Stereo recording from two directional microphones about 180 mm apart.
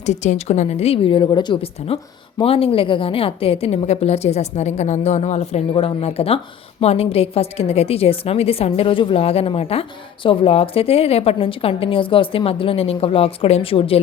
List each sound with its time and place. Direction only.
0.0 s a woman's voice: 40° left (ahead or behind)